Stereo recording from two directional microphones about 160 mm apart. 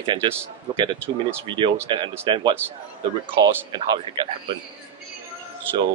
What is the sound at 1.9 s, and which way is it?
Speech, 30° right (ahead or behind).